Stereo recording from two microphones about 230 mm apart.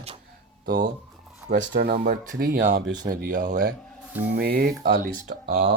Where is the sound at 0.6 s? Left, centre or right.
Right.